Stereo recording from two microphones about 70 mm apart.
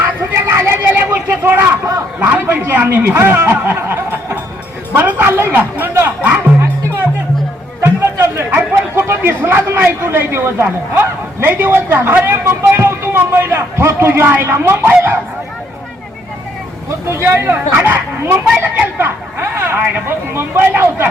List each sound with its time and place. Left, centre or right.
0.2 s vehicle: right
1.5 s a sound: right
6.0 s music: right
7.8 s music: right
8.4 s a man's voice: right
17.1 s speech: right